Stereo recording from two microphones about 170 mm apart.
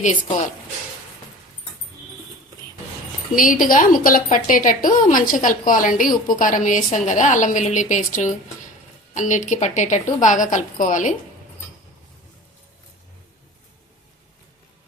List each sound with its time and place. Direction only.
3.3 s a woman's voice: 50° left (ahead or behind)